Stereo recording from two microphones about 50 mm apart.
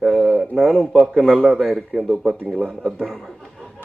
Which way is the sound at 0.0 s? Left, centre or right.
Centre.